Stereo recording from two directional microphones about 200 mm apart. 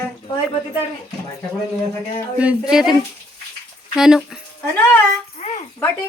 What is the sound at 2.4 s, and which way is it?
Speech, 5° right (ahead or behind).